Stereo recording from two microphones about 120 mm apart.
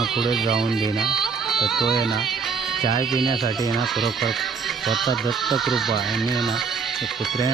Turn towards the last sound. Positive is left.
turn(degrees=0)  # may be behind; listen again after turning